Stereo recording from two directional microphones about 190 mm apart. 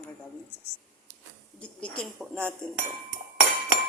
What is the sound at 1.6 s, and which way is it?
Speech, 5° left (ahead or behind).